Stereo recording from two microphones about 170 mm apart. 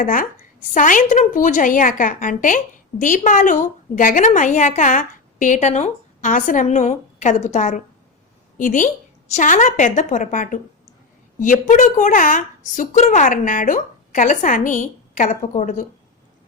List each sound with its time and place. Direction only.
0.0 s a woman's voice: 55° left (ahead or behind)